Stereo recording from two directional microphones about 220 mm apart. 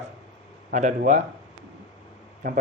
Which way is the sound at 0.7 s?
35° right (ahead or behind).